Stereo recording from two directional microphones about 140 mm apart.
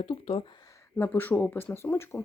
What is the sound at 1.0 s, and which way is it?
Speech, 15° left (ahead or behind).